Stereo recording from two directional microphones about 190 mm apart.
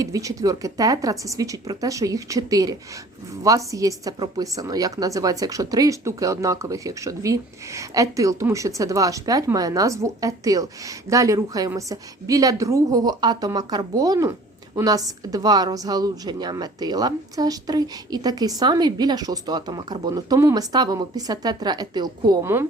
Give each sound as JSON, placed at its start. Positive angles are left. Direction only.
{"t": 0.0, "sound": "a woman's voice", "side_deg": -15}